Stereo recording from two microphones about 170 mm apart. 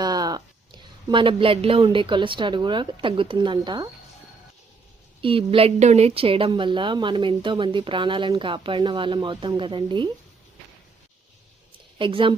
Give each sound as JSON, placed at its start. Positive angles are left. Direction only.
{"t": 0.0, "sound": "speech", "side_deg": -25}
{"t": 5.2, "sound": "a woman's voice", "side_deg": -30}
{"t": 11.9, "sound": "speech", "side_deg": -30}